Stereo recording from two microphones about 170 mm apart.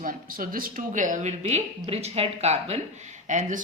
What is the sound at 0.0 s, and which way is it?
Speech, 55° right (ahead or behind).